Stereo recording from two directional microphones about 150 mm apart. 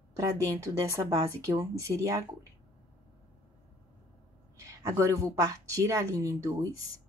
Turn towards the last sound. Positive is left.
turn(degrees=-20)  # may be behind; listen again after turning